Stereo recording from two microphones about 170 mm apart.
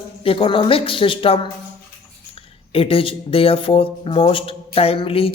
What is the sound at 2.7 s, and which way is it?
A man's voice, 35° left (ahead or behind).